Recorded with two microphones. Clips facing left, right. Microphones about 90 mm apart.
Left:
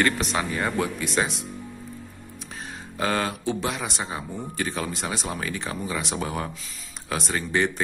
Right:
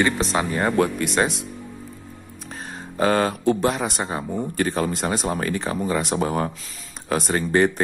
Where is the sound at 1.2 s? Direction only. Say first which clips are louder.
Right 5 dB; centre (ahead or behind).